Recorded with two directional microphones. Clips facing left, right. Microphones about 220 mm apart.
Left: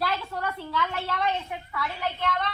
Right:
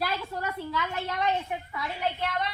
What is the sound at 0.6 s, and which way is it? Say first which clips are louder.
Speech: left 1 dB; 15° right (ahead or behind).